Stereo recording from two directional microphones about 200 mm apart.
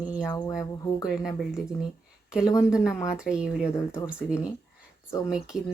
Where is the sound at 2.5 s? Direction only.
15° left (ahead or behind).